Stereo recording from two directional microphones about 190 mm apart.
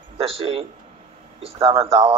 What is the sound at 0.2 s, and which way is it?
Speech, 30° right (ahead or behind).